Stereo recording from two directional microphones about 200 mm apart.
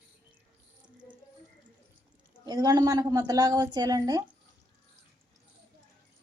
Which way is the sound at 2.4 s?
20° right (ahead or behind).